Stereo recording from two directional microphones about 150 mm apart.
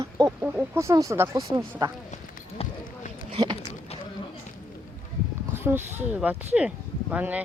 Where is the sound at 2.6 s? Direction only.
40° left (ahead or behind).